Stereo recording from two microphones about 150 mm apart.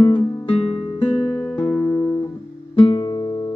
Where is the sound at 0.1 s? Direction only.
40° left (ahead or behind).